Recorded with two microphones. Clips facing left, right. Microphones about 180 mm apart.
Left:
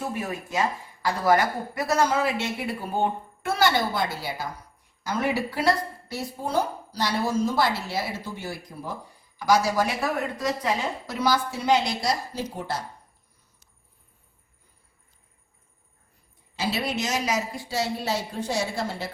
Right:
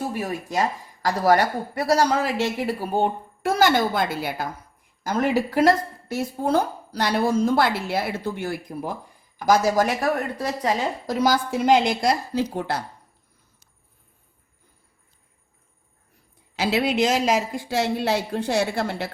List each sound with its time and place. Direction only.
0.2 s a woman's voice: 35° right (ahead or behind)
3.5 s speech: 45° right (ahead or behind)
5.0 s a woman's voice: 45° right (ahead or behind)
11.5 s speech: 55° right (ahead or behind)
16.6 s speech: 90° right; by 19.1 s 65° right (ahead or behind)